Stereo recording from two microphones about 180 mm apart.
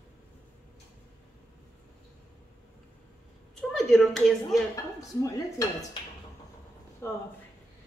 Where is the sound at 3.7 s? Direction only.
Centre (ahead or behind).